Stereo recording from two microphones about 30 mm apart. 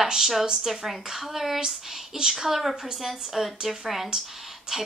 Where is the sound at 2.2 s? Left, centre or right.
Centre.